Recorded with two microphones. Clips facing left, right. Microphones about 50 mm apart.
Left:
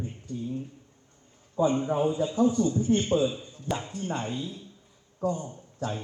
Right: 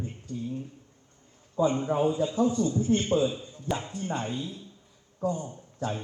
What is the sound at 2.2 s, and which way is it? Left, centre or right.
Speech, left.